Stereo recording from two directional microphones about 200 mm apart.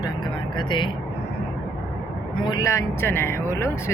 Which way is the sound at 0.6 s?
25° left (ahead or behind).